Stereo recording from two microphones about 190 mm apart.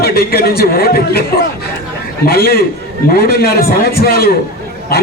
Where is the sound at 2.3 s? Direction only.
55° left (ahead or behind).